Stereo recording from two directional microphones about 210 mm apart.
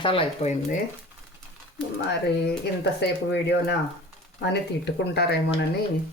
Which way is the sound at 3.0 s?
55° left (ahead or behind).